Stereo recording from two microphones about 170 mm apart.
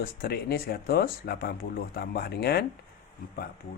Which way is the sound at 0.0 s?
65° left (ahead or behind).